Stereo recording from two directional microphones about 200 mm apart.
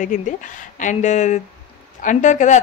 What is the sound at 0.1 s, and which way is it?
A woman's voice, 40° left (ahead or behind).